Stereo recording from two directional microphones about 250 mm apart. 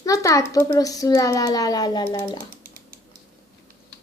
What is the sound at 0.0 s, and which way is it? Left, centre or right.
A child's voice, centre.